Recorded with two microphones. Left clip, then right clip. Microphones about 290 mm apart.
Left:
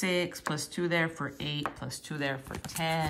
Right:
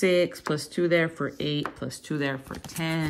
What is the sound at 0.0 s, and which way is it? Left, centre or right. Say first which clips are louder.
Speech: right 8 dB; centre.